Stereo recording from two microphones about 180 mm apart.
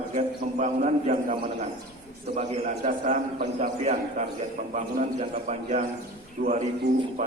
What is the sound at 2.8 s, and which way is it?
A man's voice, 50° right (ahead or behind).